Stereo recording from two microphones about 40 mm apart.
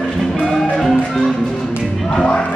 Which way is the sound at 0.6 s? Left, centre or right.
Centre.